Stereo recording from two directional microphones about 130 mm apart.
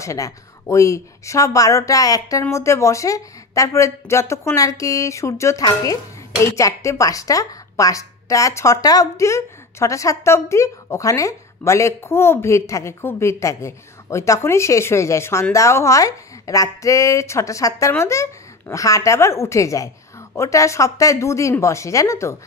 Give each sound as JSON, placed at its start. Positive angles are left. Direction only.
{"t": 0.0, "sound": "a woman's voice", "side_deg": 25}